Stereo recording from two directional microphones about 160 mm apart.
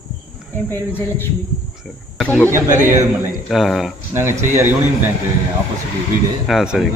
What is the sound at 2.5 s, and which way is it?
Speech, 15° right (ahead or behind).